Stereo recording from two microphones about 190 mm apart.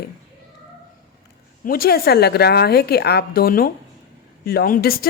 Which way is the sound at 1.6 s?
50° left (ahead or behind).